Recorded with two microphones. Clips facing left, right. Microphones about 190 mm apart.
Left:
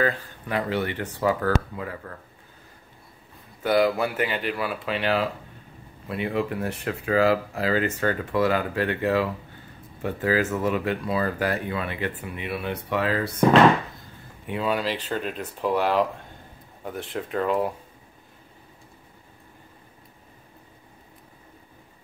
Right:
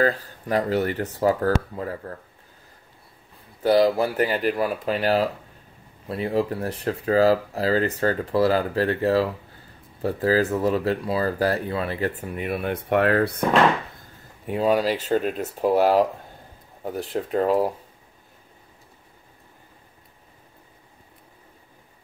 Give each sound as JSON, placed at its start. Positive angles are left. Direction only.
{"t": 0.0, "sound": "speech", "side_deg": -40}
{"t": 3.6, "sound": "speech", "side_deg": -35}
{"t": 14.4, "sound": "speech", "side_deg": -40}